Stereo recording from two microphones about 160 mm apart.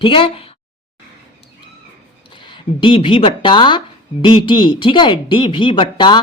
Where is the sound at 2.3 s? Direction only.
30° left (ahead or behind).